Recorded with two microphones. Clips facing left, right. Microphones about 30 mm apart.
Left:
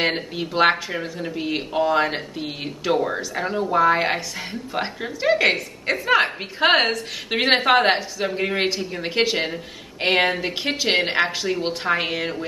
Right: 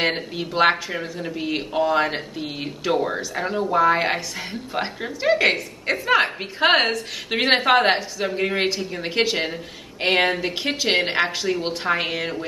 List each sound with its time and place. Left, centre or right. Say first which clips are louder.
0.0 s a woman's voice: even; centre